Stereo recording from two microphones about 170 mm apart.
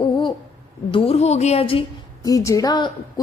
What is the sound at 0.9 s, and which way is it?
Speech, 35° left (ahead or behind).